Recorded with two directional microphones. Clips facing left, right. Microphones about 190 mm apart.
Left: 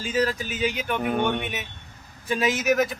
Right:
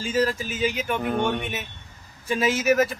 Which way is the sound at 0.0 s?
Centre (ahead or behind).